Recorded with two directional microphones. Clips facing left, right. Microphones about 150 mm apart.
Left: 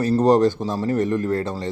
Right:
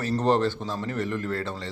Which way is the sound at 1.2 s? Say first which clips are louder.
Left 7 dB; 15° left (ahead or behind).